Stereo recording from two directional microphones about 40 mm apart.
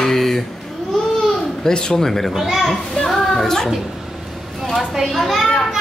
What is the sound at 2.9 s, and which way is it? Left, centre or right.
Music, centre.